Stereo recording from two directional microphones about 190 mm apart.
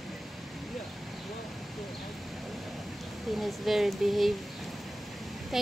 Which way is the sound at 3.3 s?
Centre (ahead or behind).